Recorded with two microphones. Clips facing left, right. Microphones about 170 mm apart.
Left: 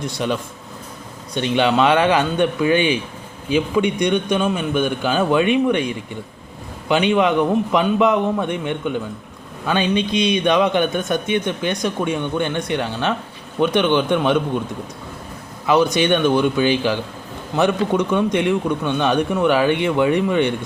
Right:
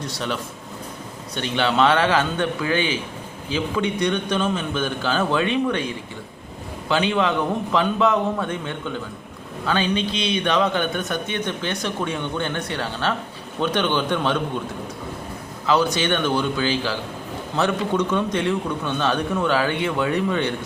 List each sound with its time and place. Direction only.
0.2 s a man's voice: 15° left (ahead or behind)
1.4 s a man's voice: 15° left (ahead or behind)
4.0 s a man's voice: 10° left (ahead or behind)
6.8 s a man's voice: 15° left (ahead or behind)
15.6 s a man's voice: 15° left (ahead or behind)